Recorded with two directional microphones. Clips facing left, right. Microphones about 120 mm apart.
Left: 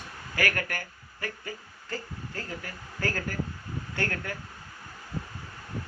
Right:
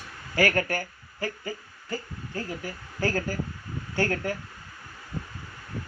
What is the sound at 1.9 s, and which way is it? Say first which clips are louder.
Speech: right 2 dB; 15° right (ahead or behind).